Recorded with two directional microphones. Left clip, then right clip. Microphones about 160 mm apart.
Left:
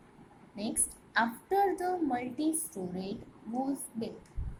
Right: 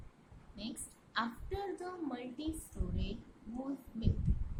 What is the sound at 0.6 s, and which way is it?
A woman's voice, 15° left (ahead or behind).